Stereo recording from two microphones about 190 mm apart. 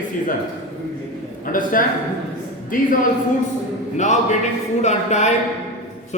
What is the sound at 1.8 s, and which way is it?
Speech, 45° left (ahead or behind).